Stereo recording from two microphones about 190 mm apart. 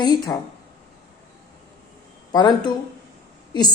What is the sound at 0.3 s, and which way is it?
Speech, 20° left (ahead or behind).